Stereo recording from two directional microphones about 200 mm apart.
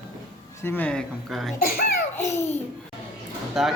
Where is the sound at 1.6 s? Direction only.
50° left (ahead or behind).